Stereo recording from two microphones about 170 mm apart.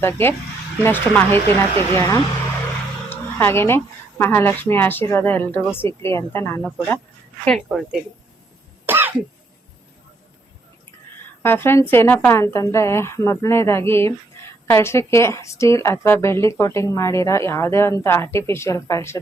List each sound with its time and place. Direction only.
0.0 s a woman's voice: 15° left (ahead or behind)
8.9 s cough: 10° right (ahead or behind)
11.4 s a woman's voice: 15° left (ahead or behind)